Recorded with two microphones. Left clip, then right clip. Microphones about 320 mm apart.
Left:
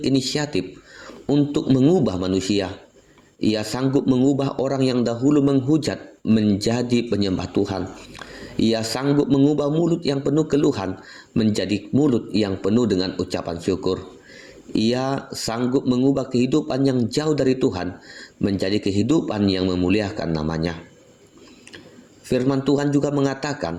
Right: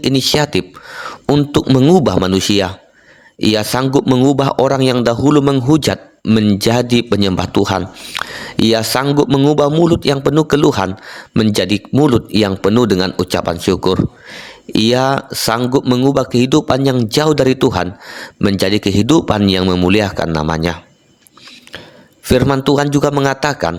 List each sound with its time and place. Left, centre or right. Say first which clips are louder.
0.0 s a man's voice: right 9 dB; right
22.3 s a man's voice: right 8 dB; right